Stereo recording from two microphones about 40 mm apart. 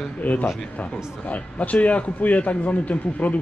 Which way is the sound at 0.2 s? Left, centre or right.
Left.